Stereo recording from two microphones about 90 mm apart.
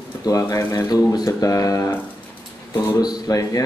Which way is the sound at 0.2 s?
40° left (ahead or behind).